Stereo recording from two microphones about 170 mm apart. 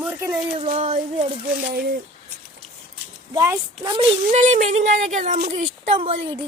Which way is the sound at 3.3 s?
15° right (ahead or behind).